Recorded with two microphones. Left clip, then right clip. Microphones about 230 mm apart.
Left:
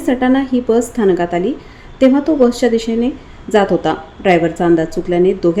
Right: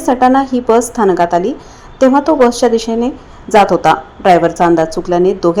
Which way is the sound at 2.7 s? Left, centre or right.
Centre.